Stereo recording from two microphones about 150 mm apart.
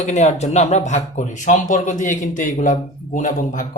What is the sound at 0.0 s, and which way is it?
Speech, 50° left (ahead or behind).